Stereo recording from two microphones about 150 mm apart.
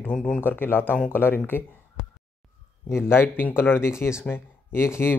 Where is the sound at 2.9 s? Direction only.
15° left (ahead or behind).